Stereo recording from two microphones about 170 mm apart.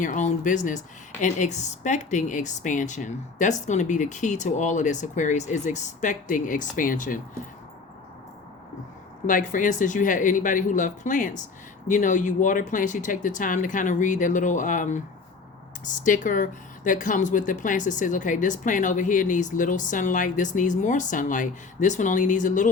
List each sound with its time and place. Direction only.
0.0 s speech: 45° left (ahead or behind)
9.2 s speech: 50° left (ahead or behind)